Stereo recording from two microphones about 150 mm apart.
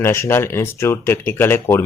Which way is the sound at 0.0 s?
15° left (ahead or behind).